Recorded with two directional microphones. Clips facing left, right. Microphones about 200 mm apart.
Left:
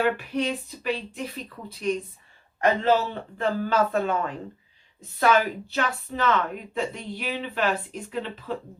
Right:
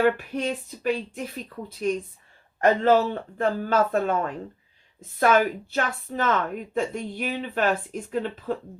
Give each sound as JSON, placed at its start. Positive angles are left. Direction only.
{"t": 0.0, "sound": "speech", "side_deg": -45}